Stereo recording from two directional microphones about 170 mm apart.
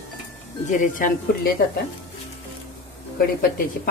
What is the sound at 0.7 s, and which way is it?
Speech, 50° left (ahead or behind).